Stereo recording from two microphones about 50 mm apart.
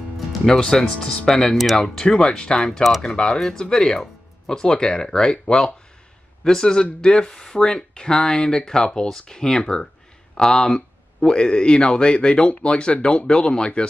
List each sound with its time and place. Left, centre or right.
0.5 s speech: centre
1.8 s speech: centre